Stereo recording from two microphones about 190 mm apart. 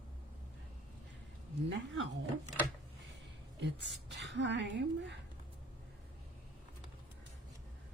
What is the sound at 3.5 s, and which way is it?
A woman's voice, 65° right (ahead or behind).